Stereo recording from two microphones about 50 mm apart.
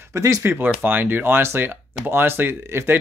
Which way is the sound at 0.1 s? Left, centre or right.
Right.